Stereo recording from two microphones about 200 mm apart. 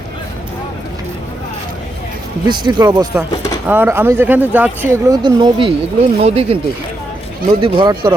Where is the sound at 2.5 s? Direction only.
20° right (ahead or behind).